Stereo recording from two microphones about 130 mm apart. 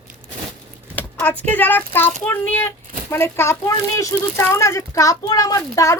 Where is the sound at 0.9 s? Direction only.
15° left (ahead or behind).